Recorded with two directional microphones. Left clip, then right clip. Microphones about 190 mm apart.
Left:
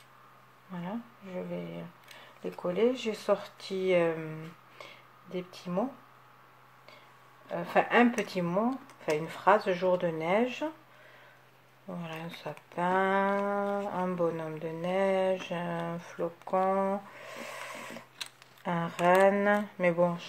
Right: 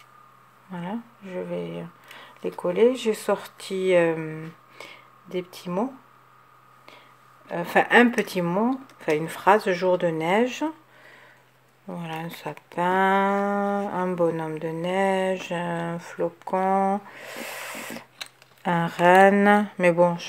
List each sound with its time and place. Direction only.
0.7 s speech: 40° right (ahead or behind)
7.4 s speech: 45° right (ahead or behind)
12.0 s speech: 40° right (ahead or behind)